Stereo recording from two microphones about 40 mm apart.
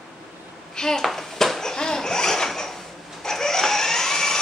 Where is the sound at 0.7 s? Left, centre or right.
Centre.